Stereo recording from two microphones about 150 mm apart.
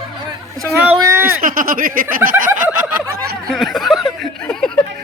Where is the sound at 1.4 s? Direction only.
65° right (ahead or behind).